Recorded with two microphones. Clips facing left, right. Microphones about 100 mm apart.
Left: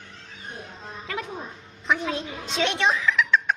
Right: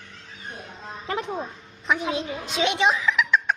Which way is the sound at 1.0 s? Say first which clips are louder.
Right 5 dB; 30° right (ahead or behind).